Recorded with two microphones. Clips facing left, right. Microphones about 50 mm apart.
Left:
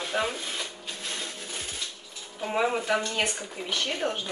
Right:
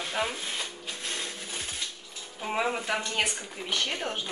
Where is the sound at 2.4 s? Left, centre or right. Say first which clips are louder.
Left 3 dB; centre.